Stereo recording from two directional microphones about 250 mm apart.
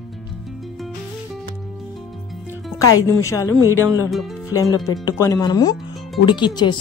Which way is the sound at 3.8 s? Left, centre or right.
Centre.